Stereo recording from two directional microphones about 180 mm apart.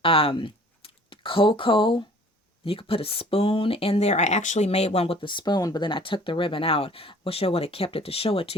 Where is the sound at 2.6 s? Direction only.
30° left (ahead or behind).